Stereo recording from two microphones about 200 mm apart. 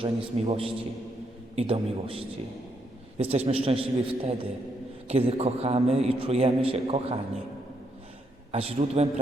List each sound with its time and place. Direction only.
0.0 s a man's voice: 25° right (ahead or behind)
3.3 s a man's voice: 30° right (ahead or behind)
8.5 s a man's voice: 30° right (ahead or behind)